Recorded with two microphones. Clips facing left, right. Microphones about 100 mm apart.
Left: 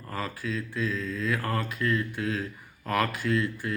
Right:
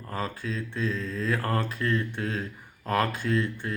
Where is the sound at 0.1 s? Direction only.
35° right (ahead or behind).